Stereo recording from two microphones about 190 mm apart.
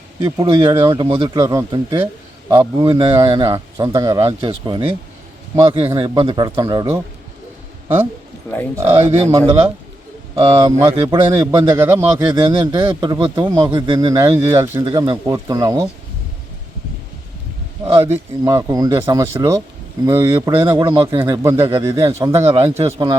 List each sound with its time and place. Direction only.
0.2 s a man's voice: 20° right (ahead or behind)
9.1 s a man's voice: 20° right (ahead or behind)
10.3 s a man's voice: 15° right (ahead or behind)
18.0 s speech: 15° right (ahead or behind)